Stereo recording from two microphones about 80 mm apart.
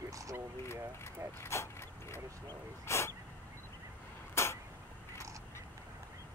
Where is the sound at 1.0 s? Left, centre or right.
Left.